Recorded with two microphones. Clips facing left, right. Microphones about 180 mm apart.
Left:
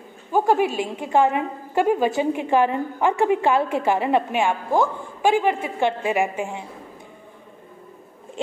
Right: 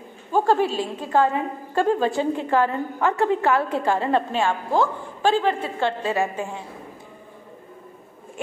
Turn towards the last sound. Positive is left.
turn(degrees=15)  # may be behind; listen again after turning